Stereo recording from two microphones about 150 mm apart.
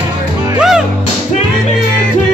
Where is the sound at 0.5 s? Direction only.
5° right (ahead or behind).